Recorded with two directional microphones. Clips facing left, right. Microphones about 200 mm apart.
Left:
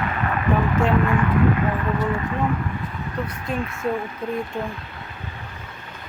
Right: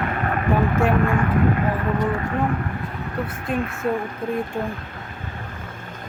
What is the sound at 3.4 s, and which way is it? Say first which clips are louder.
Speech: right 3 dB; 50° right (ahead or behind).